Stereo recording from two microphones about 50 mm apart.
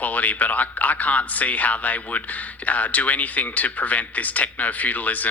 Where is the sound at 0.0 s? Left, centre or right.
Left.